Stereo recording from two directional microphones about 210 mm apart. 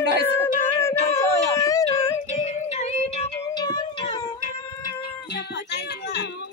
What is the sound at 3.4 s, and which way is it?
Music, 15° left (ahead or behind).